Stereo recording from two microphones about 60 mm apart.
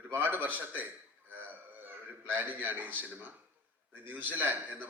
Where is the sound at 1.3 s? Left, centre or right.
Right.